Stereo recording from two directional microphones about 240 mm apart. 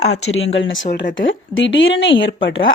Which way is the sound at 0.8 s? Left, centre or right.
Left.